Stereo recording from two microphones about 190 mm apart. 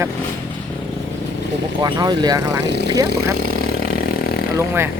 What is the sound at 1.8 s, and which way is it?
Speech, 20° right (ahead or behind).